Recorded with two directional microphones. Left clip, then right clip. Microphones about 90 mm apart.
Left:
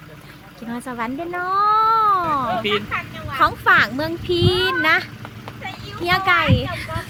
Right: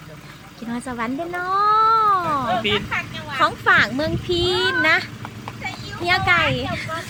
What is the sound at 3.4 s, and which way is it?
Speech, 35° left (ahead or behind).